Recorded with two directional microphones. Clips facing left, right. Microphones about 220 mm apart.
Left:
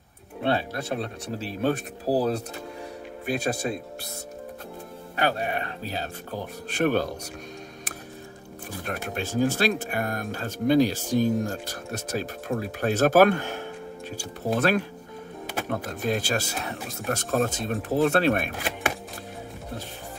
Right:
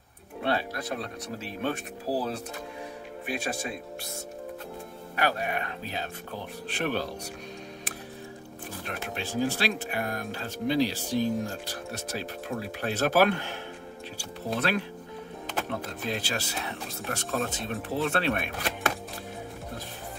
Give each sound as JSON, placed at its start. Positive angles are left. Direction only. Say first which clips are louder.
{"t": 0.4, "sound": "speech", "louder": "left 3 dB", "side_deg": 25}
{"t": 5.1, "sound": "speech", "louder": "left 2 dB", "side_deg": 30}
{"t": 8.8, "sound": "speech", "louder": "left 5 dB", "side_deg": 45}
{"t": 18.6, "sound": "chopping", "louder": "left 1 dB", "side_deg": 15}